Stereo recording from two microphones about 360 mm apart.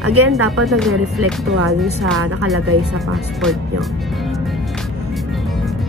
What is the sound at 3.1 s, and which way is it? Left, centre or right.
Speech, centre.